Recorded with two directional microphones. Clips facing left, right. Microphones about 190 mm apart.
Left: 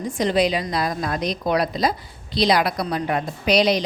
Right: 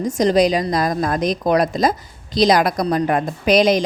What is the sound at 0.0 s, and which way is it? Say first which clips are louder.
A woman's voice: right 5 dB; 45° right (ahead or behind).